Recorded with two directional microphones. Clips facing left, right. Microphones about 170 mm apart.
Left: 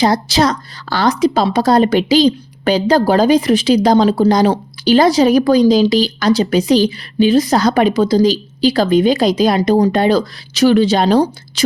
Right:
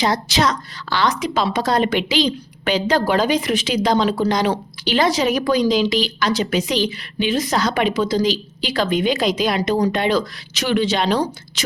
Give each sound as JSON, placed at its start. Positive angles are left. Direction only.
{"t": 0.0, "sound": "a woman's voice", "side_deg": 35}